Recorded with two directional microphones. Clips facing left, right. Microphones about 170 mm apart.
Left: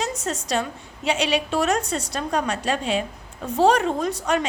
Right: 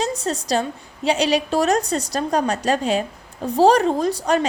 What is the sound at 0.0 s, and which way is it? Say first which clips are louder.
A woman's voice: right 4 dB; 35° right (ahead or behind).